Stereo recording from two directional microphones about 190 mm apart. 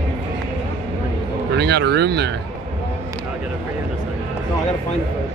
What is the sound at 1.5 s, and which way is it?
Speech, 60° right (ahead or behind).